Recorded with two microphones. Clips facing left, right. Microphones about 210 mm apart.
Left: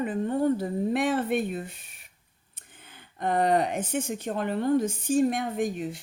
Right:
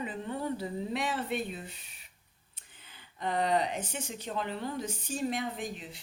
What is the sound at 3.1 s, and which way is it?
Speech, 50° left (ahead or behind).